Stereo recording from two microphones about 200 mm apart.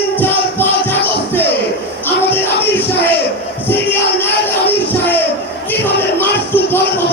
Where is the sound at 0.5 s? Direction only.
10° left (ahead or behind).